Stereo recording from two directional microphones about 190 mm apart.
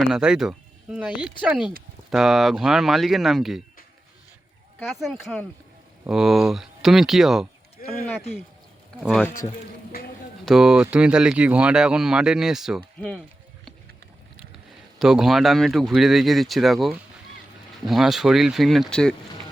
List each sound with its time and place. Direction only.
0.1 s speech: 5° right (ahead or behind)
4.9 s speech: centre (ahead or behind)
7.8 s a sound: 45° left (ahead or behind)
10.4 s speech: 5° right (ahead or behind)
14.9 s speech: centre (ahead or behind)